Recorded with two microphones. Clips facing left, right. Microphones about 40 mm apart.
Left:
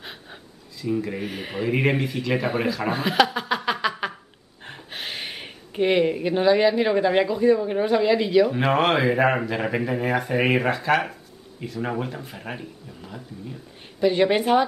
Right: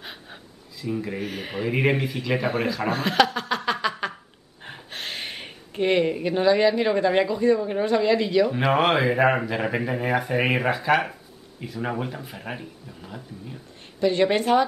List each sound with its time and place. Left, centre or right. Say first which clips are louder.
0.0 s speech: even; centre
13.9 s a woman's voice: left 1 dB; centre